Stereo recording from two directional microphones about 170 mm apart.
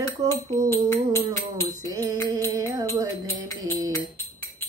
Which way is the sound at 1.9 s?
20° right (ahead or behind).